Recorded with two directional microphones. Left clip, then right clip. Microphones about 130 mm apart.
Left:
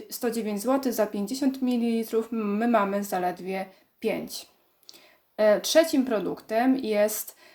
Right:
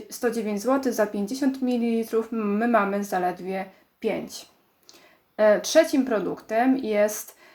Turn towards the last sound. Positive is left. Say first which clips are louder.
# right 2 dB
turn(degrees=15)  # may be behind; listen again after turning